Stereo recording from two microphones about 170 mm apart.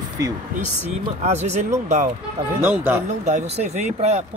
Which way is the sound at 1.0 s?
40° right (ahead or behind).